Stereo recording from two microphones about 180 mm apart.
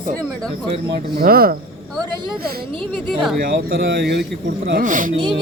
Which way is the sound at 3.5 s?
80° right.